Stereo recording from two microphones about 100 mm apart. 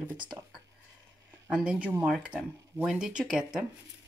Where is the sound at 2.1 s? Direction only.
5° right (ahead or behind).